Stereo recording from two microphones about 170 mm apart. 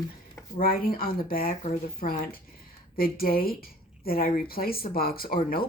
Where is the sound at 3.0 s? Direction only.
60° left (ahead or behind).